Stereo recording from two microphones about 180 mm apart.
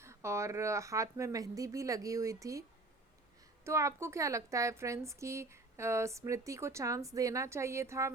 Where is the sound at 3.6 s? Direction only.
15° right (ahead or behind).